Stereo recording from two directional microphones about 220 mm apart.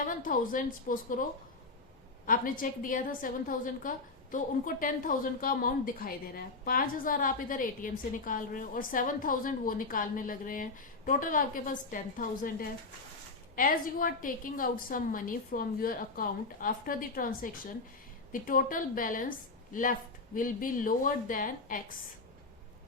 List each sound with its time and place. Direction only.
0.0 s a woman's voice: 35° left (ahead or behind)
2.2 s a woman's voice: 40° left (ahead or behind)